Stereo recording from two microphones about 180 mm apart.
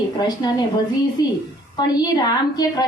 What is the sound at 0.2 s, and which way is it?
A woman's voice, 20° left (ahead or behind).